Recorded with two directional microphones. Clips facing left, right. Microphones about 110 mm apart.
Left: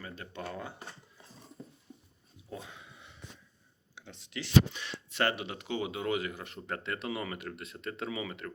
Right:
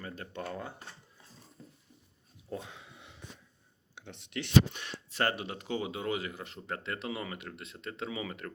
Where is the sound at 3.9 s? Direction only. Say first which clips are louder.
Right 3 dB; 65° right (ahead or behind); by 8.3 s 25° right (ahead or behind).